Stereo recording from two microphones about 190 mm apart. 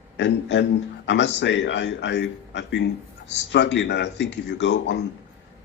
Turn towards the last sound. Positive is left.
turn(degrees=65)  # may be behind; listen again after turning